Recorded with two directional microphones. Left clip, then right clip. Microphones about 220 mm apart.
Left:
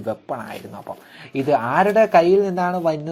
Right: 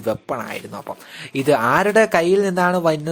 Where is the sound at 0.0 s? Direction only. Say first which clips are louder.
Right 3 dB; 20° right (ahead or behind).